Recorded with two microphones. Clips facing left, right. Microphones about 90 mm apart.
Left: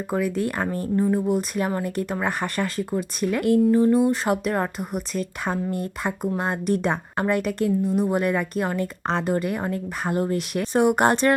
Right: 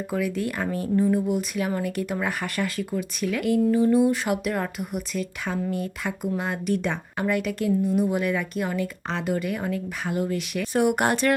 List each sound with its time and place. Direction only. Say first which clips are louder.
0.1 s speech: left 3 dB; 40° left (ahead or behind)
3.9 s speech: left 1 dB; 25° left (ahead or behind); by 10.7 s 45° left (ahead or behind)
10.8 s speech: left 3 dB; 30° left (ahead or behind)